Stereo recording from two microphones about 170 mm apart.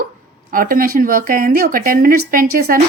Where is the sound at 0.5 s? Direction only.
55° right (ahead or behind).